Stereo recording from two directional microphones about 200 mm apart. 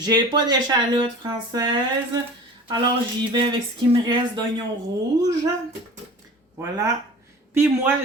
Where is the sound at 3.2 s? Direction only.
25° right (ahead or behind).